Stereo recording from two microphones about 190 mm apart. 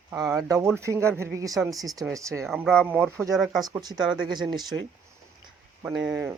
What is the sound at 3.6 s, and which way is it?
Speech, 20° right (ahead or behind).